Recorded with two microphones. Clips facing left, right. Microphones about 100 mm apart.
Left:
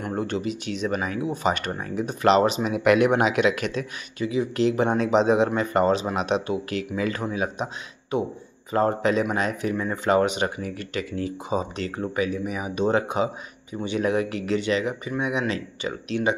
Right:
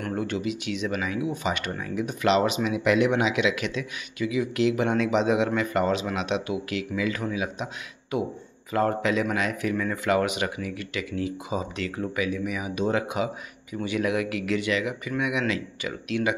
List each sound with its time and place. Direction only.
0.1 s speech: 35° left (ahead or behind)
2.7 s speech: 55° left (ahead or behind); by 16.3 s 30° left (ahead or behind)